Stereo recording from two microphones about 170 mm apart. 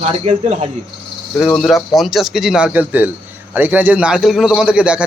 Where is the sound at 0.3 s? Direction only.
40° right (ahead or behind).